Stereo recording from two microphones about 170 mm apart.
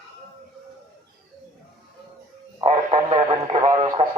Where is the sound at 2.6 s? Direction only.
40° right (ahead or behind).